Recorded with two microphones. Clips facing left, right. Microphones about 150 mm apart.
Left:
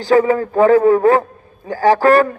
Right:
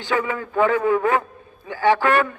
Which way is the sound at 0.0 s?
35° left (ahead or behind).